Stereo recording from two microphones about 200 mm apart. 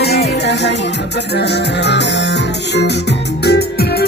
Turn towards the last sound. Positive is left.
turn(degrees=55)  # may be behind; listen again after turning